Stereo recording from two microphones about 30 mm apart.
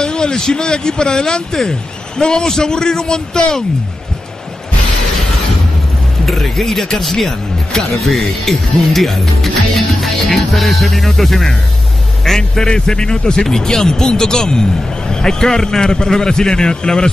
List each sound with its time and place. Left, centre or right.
0.0 s speech: left
6.2 s speech: centre
9.2 s music: centre
12.4 s speech: left